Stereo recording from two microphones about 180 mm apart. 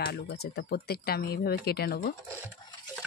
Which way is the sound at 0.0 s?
65° left (ahead or behind).